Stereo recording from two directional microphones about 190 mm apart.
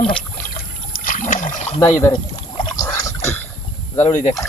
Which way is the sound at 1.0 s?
45° left (ahead or behind).